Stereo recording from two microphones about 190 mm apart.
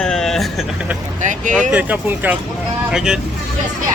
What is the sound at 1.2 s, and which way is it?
Speech, 40° right (ahead or behind).